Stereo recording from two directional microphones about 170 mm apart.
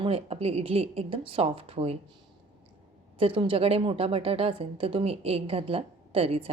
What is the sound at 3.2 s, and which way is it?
A woman's voice, 30° right (ahead or behind).